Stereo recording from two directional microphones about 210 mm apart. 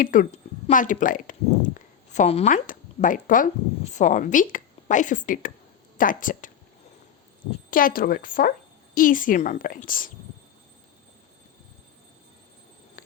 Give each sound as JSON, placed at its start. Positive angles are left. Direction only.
{"t": 0.0, "sound": "a woman's voice", "side_deg": 40}
{"t": 7.7, "sound": "a woman's voice", "side_deg": 40}